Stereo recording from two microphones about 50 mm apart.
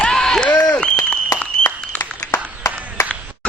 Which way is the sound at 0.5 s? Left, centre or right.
Left.